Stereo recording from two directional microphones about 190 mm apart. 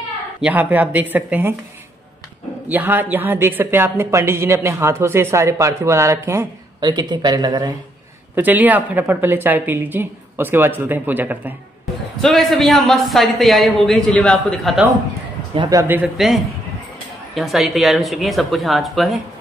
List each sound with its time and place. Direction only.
0.4 s speech: 10° right (ahead or behind)
2.7 s speech: 10° right (ahead or behind)
8.4 s speech: 10° right (ahead or behind)
12.2 s speech: centre (ahead or behind)
15.5 s speech: 20° right (ahead or behind); by 19.1 s centre (ahead or behind)